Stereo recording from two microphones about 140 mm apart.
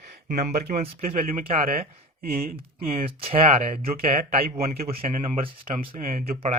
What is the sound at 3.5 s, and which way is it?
Speech, 90° right.